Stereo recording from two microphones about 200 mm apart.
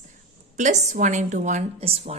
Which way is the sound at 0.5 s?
35° right (ahead or behind).